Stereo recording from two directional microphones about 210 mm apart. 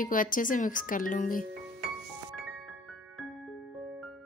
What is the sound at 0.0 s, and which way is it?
Speech, 40° left (ahead or behind).